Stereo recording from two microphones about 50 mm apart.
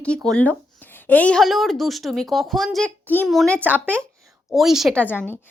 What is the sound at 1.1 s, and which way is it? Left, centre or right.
Speech, left.